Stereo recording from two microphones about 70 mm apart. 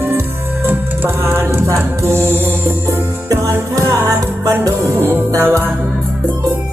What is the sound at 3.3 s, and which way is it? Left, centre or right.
Music, right.